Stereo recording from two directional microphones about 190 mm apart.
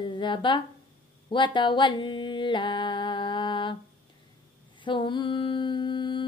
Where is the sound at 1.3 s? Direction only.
25° left (ahead or behind).